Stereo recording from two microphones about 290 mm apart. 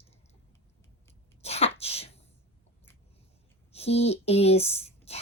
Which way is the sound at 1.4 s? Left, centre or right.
Left.